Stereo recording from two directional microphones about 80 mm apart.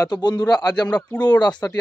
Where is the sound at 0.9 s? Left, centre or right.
Left.